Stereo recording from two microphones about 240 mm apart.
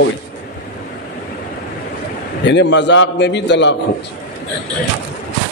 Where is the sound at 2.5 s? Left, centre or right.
Left.